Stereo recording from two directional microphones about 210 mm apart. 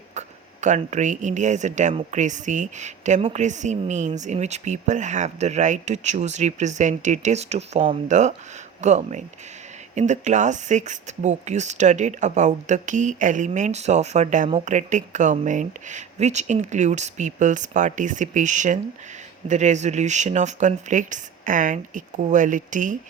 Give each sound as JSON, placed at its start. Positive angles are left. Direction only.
{"t": 0.1, "sound": "speech", "side_deg": -35}